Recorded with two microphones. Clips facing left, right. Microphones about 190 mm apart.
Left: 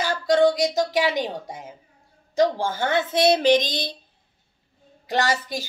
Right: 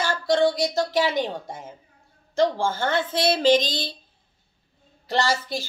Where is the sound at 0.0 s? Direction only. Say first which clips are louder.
Left 2 dB; 15° left (ahead or behind).